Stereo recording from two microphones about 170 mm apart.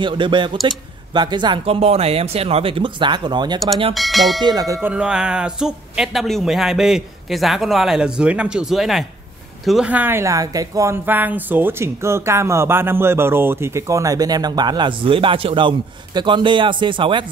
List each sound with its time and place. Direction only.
0.0 s speech: 30° right (ahead or behind)
3.9 s speech: centre (ahead or behind)
4.4 s speech: 25° right (ahead or behind)
4.8 s speech: 5° right (ahead or behind); by 17.3 s 30° right (ahead or behind)